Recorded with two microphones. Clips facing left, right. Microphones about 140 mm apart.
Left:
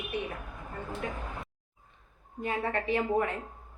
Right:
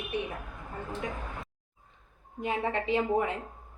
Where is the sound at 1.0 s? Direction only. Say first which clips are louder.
Even; 15° right (ahead or behind).